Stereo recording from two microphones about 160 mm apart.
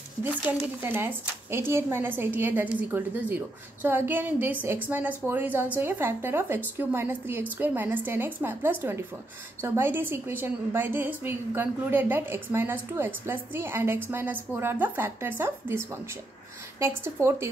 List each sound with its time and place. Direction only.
0.2 s a woman's voice: 10° right (ahead or behind)